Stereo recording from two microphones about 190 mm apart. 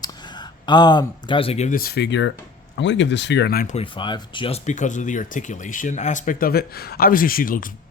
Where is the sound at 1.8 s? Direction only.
60° left (ahead or behind).